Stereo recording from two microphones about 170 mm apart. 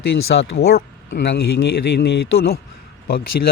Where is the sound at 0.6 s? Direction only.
75° left (ahead or behind).